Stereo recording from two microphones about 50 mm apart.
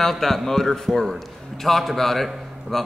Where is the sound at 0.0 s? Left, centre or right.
Centre.